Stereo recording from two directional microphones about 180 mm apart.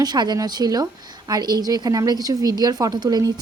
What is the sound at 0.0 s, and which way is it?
A woman's voice, 25° right (ahead or behind).